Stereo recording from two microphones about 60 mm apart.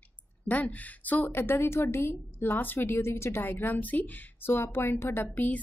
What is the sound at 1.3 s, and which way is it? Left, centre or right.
A woman's voice, left.